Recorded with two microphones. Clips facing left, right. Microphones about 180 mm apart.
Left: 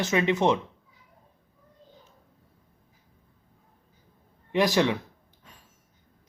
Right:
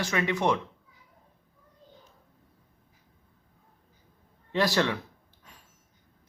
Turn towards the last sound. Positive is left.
turn(degrees=15)  # may be behind; listen again after turning